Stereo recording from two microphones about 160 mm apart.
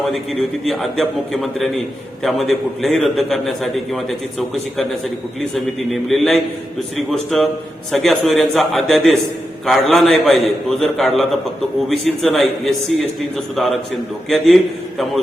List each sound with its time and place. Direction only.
0.0 s a man's voice: centre (ahead or behind)